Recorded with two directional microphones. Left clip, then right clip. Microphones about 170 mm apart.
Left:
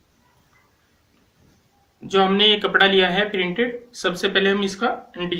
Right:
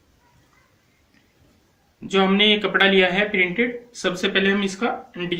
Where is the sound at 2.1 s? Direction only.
25° right (ahead or behind).